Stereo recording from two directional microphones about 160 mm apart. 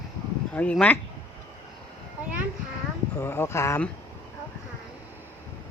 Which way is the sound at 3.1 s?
15° left (ahead or behind).